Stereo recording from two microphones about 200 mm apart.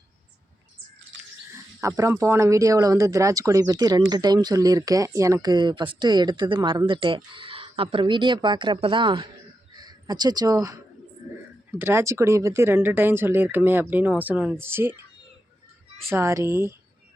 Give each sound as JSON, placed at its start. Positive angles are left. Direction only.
{"t": 1.8, "sound": "speech", "side_deg": -15}
{"t": 11.8, "sound": "speech", "side_deg": -15}
{"t": 16.0, "sound": "speech", "side_deg": -15}